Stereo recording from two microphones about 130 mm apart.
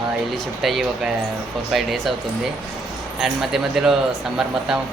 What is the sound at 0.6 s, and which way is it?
Speech, centre (ahead or behind).